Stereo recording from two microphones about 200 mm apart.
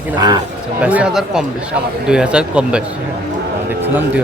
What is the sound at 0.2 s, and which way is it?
Speech, 20° right (ahead or behind).